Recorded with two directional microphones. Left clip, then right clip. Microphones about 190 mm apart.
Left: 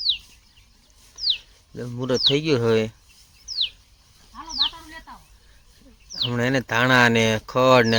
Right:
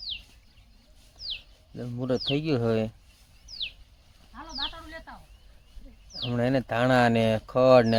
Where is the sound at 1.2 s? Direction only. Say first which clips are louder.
Left 12 dB; 25° left (ahead or behind).